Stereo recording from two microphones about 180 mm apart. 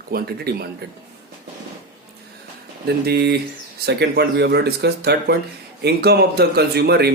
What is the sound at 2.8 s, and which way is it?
Speech, 65° right (ahead or behind).